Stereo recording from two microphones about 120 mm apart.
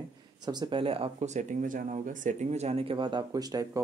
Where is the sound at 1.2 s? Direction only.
85° right.